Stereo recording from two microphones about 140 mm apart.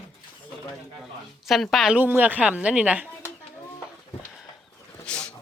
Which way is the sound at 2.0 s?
15° right (ahead or behind).